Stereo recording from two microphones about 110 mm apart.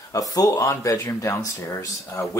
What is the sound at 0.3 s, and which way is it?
Speech, 30° left (ahead or behind).